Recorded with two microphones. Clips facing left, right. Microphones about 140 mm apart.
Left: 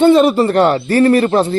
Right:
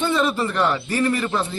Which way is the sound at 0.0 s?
70° left (ahead or behind).